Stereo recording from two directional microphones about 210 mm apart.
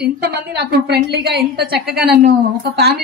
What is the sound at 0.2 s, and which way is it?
A woman's voice, 50° right (ahead or behind).